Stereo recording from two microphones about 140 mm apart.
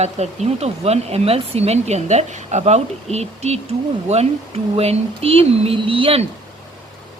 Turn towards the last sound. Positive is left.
turn(degrees=-40)  # may be behind; listen again after turning